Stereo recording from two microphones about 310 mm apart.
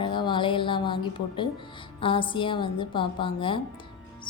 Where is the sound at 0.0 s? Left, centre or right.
Centre.